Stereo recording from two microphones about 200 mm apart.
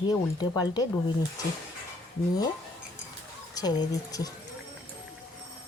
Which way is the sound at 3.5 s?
20° left (ahead or behind).